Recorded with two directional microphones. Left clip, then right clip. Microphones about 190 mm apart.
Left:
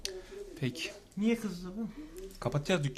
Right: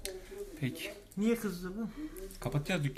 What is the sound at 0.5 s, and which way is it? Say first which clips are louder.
Speech: left 3 dB; 25° left (ahead or behind).